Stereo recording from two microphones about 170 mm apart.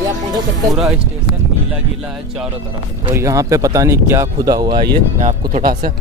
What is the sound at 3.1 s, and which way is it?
Speech, 15° right (ahead or behind).